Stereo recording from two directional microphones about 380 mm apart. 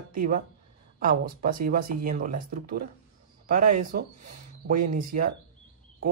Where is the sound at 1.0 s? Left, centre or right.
Right.